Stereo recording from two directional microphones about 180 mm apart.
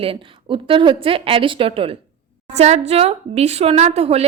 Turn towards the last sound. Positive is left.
turn(degrees=-35)  # may be behind; listen again after turning